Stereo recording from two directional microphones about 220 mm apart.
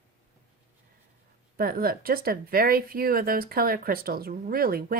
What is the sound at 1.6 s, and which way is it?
Speech, 40° right (ahead or behind).